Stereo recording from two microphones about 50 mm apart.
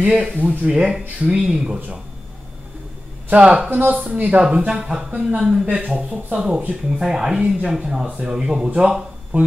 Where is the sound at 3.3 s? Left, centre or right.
Centre.